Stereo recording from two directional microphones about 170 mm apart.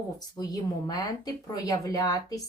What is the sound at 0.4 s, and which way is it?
A woman's voice, 20° left (ahead or behind).